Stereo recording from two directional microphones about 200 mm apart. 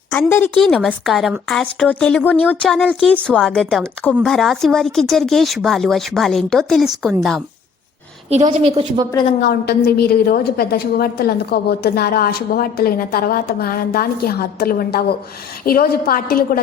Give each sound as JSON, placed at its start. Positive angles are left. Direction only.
{"t": 0.1, "sound": "a woman's voice", "side_deg": 10}
{"t": 8.3, "sound": "a woman's voice", "side_deg": -30}
{"t": 9.4, "sound": "a woman's voice", "side_deg": 55}